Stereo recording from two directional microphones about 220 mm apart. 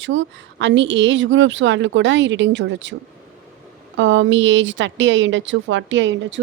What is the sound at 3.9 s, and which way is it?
Speech, 60° right (ahead or behind).